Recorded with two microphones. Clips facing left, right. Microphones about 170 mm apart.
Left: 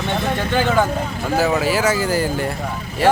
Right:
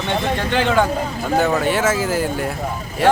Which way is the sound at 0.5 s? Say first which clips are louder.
Right 1 dB; 5° left (ahead or behind).